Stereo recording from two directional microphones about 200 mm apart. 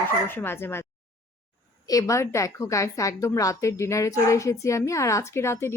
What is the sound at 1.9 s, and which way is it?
A woman's voice, 15° left (ahead or behind).